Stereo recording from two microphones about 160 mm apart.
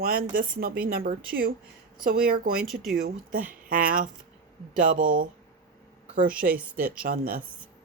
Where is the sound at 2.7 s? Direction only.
Centre (ahead or behind).